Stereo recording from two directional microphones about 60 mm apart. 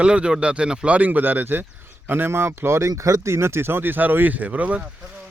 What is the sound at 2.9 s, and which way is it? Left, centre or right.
Speech, right.